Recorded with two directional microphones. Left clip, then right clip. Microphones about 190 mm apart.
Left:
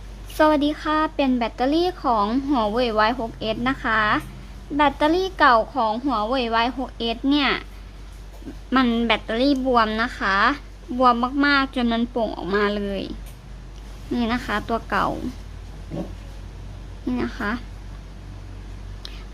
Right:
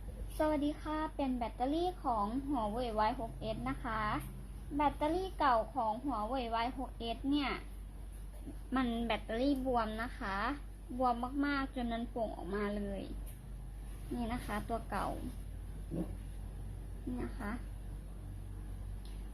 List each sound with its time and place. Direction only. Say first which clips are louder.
0.3 s a woman's voice: left 16 dB; 35° left (ahead or behind)
8.7 s a woman's voice: left 16 dB; 25° left (ahead or behind)
14.2 s a woman's voice: left 16 dB; 25° left (ahead or behind)
17.2 s a woman's voice: left 17 dB; 25° left (ahead or behind)